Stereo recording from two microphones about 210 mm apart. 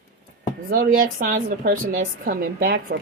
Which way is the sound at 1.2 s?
45° right (ahead or behind).